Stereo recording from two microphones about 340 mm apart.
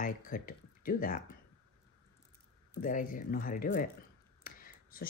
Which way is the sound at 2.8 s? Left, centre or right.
Left.